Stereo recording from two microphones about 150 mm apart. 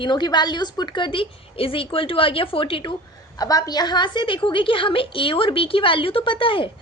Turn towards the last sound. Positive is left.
turn(degrees=35)  # may be behind; listen again after turning